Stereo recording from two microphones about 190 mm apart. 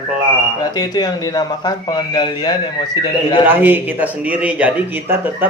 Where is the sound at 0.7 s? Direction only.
20° left (ahead or behind).